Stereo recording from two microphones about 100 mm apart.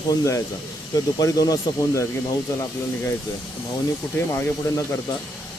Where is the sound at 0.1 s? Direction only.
30° left (ahead or behind).